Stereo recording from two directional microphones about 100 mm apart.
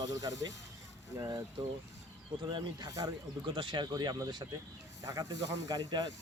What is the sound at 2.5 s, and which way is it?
Speech, 45° right (ahead or behind).